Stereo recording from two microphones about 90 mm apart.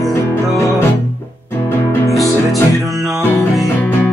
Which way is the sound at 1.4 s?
30° left (ahead or behind).